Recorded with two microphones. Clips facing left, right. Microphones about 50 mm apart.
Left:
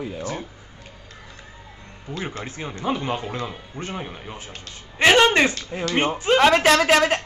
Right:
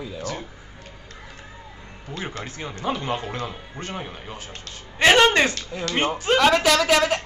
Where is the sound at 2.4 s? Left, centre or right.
Left.